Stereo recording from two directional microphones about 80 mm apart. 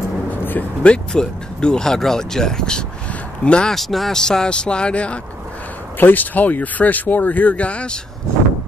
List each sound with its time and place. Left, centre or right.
0.5 s speech: left
1.1 s speech: centre